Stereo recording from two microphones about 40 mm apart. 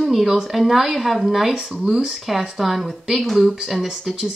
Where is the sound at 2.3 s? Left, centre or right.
Centre.